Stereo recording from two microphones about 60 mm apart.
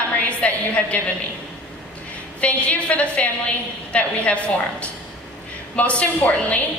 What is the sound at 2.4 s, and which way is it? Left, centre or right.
A woman's voice, left.